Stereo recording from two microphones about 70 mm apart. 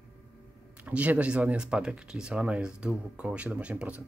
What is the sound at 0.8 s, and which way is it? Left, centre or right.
Speech, right.